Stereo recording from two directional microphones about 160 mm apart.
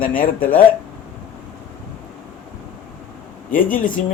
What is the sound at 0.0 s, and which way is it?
Speech, 65° left (ahead or behind).